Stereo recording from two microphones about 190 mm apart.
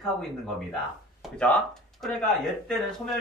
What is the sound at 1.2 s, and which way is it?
Speech, 5° left (ahead or behind).